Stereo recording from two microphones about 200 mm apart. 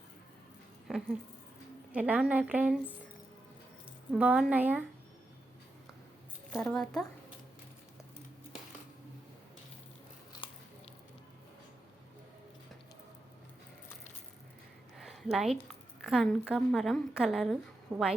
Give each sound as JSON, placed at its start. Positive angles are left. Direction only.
{"t": 0.9, "sound": "a sound", "side_deg": 0}
{"t": 1.9, "sound": "a woman's voice", "side_deg": -5}
{"t": 4.1, "sound": "a woman's voice", "side_deg": -5}
{"t": 6.7, "sound": "a woman's voice", "side_deg": 5}
{"t": 10.4, "sound": "biting", "side_deg": 25}
{"t": 14.9, "sound": "a sound", "side_deg": 0}
{"t": 16.0, "sound": "a woman's voice", "side_deg": 0}